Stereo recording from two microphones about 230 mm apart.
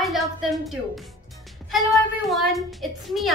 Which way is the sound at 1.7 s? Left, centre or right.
Centre.